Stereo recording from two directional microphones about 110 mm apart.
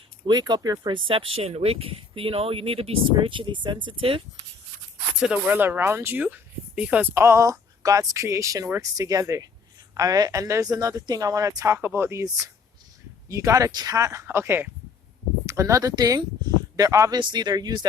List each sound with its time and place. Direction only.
0.3 s speech: 40° right (ahead or behind)
5.5 s speech: 20° right (ahead or behind)
13.2 s speech: 30° right (ahead or behind)
17.2 s speech: 45° right (ahead or behind)